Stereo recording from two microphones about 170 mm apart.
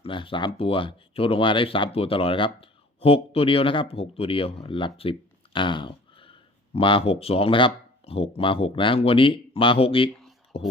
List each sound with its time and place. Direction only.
0.0 s speech: 30° left (ahead or behind)